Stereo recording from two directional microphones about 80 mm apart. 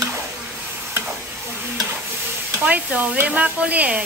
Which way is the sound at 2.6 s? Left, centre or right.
Centre.